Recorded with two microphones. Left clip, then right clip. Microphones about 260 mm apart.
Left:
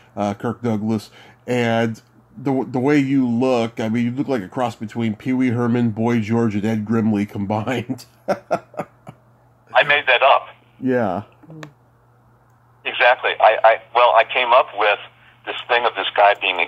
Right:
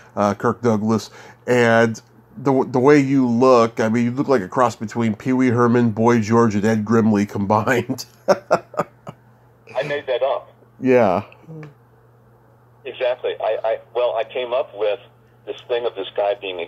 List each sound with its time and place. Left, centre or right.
0.0 s speech: centre
9.8 s radio: centre
10.8 s speech: centre
12.8 s speech: left